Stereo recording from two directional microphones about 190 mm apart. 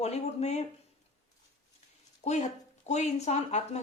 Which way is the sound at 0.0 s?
35° left (ahead or behind).